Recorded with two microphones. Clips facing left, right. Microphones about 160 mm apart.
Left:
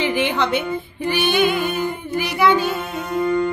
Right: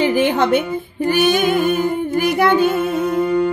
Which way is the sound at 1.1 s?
45° right (ahead or behind).